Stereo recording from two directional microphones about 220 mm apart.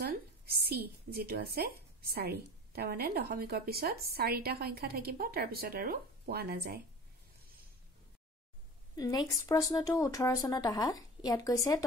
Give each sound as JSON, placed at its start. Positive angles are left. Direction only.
{"t": 0.0, "sound": "a sound", "side_deg": -45}
{"t": 2.0, "sound": "a woman's voice", "side_deg": -45}
{"t": 8.9, "sound": "speech", "side_deg": 20}